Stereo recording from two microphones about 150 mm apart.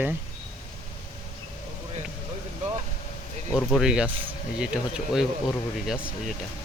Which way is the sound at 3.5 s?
Centre (ahead or behind).